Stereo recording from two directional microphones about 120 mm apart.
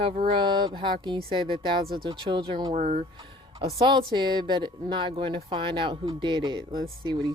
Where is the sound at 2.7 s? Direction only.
80° right.